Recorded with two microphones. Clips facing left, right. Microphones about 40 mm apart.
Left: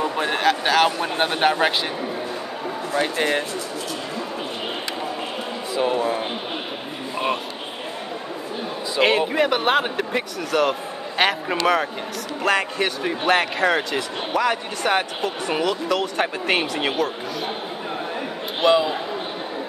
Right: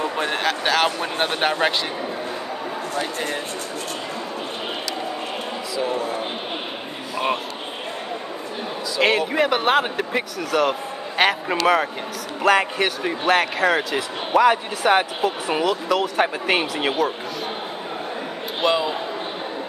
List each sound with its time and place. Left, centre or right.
0.0 s a man's voice: centre
2.9 s speech: left
5.8 s speech: left
9.0 s speech: centre
14.3 s speech: centre
18.6 s speech: centre